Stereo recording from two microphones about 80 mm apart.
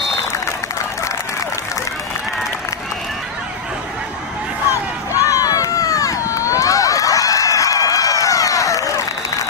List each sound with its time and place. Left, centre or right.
4.6 s run: left